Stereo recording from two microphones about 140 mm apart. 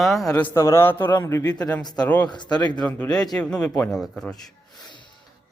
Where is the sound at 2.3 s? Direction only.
30° left (ahead or behind).